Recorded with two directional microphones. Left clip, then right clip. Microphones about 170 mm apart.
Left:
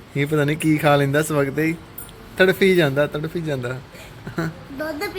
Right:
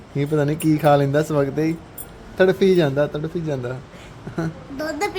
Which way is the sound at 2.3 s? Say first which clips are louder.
Even; centre (ahead or behind).